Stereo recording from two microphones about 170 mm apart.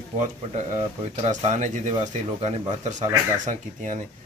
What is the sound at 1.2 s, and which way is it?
Speech, 45° right (ahead or behind).